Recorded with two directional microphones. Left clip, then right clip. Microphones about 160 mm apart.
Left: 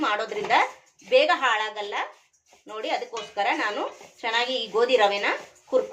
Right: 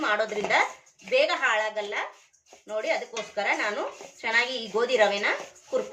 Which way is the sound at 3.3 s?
30° left (ahead or behind).